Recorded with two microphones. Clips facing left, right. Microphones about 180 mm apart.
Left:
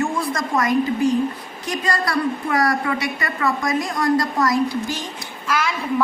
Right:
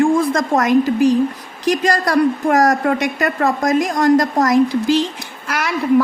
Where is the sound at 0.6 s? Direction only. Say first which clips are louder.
Right 5 dB; 90° right.